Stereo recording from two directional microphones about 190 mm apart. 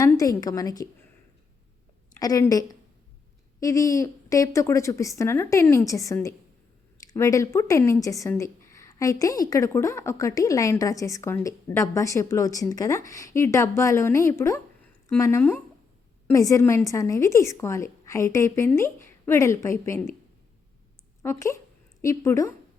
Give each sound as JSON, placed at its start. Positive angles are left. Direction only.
{"t": 0.0, "sound": "a woman's voice", "side_deg": 20}
{"t": 2.1, "sound": "a woman's voice", "side_deg": 20}
{"t": 21.2, "sound": "a woman's voice", "side_deg": 15}